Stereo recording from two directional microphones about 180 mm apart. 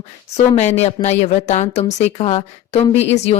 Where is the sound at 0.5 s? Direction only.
40° left (ahead or behind).